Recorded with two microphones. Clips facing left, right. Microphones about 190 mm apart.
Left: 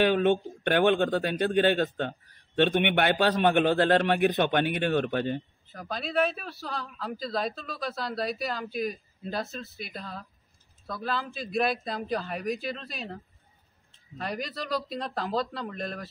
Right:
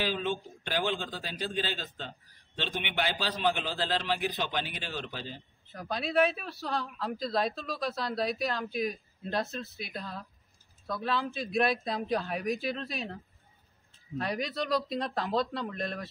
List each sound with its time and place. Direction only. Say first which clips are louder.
0.0 s a man's voice: left 9 dB; 60° left (ahead or behind)
5.7 s speech: right 1 dB; centre (ahead or behind)